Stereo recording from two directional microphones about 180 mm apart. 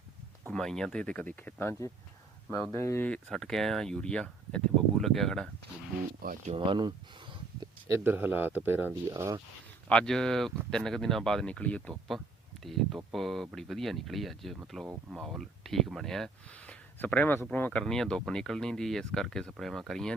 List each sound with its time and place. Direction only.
0.5 s speech: 5° left (ahead or behind)
3.2 s speech: centre (ahead or behind)
6.2 s speech: 35° right (ahead or behind)
6.7 s speech: 25° right (ahead or behind)
7.9 s speech: 10° right (ahead or behind)
9.9 s speech: 5° left (ahead or behind)